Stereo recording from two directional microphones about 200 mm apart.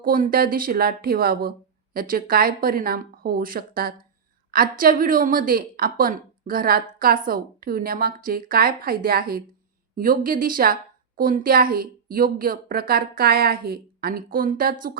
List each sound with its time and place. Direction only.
0.0 s speech: 45° right (ahead or behind)